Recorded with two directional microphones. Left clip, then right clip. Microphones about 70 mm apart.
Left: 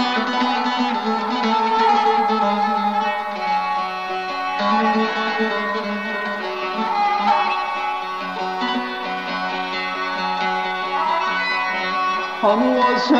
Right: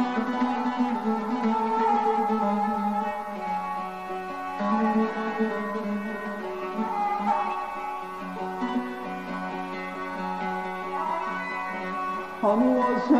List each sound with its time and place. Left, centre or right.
0.0 s music: left
4.6 s music: left
7.0 s music: left
12.0 s music: left